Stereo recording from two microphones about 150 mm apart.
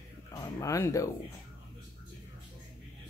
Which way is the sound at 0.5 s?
20° left (ahead or behind).